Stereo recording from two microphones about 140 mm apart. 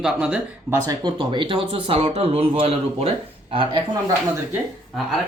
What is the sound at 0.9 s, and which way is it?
Speech, 35° right (ahead or behind).